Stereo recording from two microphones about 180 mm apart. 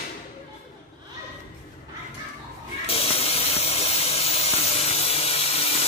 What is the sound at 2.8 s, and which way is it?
Steam, 35° left (ahead or behind).